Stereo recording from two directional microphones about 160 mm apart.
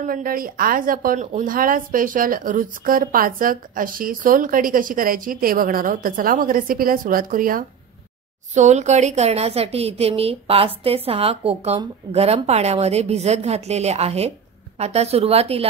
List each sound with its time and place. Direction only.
0.0 s a woman's voice: 60° right (ahead or behind)
8.5 s a woman's voice: 45° right (ahead or behind)